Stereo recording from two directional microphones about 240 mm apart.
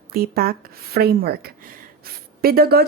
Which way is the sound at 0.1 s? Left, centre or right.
Right.